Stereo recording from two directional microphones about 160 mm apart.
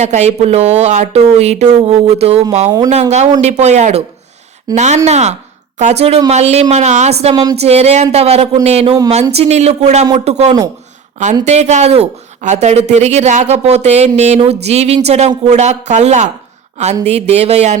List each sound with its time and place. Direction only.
0.0 s speech: 45° right (ahead or behind)
2.6 s speech: 20° right (ahead or behind)
2.9 s speech: 45° right (ahead or behind)